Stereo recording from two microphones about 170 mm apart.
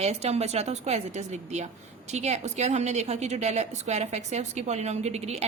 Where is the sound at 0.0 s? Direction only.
40° right (ahead or behind).